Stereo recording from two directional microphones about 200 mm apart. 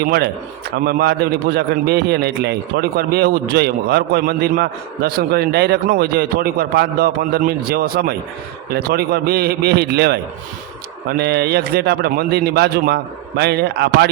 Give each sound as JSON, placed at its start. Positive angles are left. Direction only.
{"t": 0.0, "sound": "a man's voice", "side_deg": -50}